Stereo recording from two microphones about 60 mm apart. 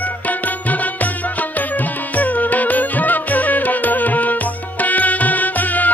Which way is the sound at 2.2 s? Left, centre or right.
Left.